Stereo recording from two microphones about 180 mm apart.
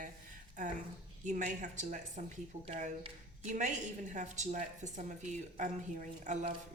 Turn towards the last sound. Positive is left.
turn(degrees=-40)  # may be behind; listen again after turning